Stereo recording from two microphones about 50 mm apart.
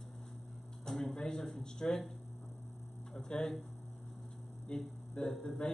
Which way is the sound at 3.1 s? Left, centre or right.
Centre.